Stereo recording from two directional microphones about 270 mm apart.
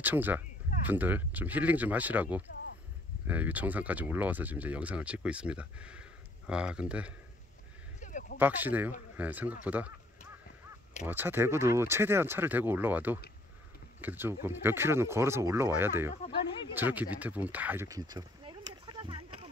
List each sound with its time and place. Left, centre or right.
0.0 s speech: centre
8.0 s a sound: left
8.4 s speech: centre
11.1 s speech: centre